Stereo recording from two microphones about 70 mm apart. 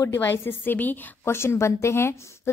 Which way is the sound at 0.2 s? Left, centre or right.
Left.